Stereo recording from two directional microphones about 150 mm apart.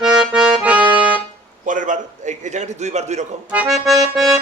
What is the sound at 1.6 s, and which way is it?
A man's voice, 60° right (ahead or behind).